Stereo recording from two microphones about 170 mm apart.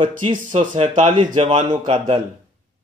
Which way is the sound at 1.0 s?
30° right (ahead or behind).